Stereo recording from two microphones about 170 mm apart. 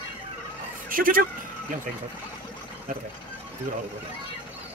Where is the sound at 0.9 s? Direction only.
55° right (ahead or behind).